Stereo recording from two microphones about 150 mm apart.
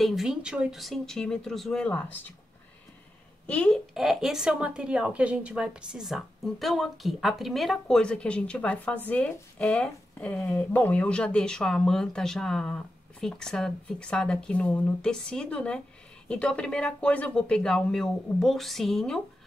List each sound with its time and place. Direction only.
0.0 s speech: centre (ahead or behind)
3.4 s speech: 10° left (ahead or behind)
3.9 s speech: 5° right (ahead or behind)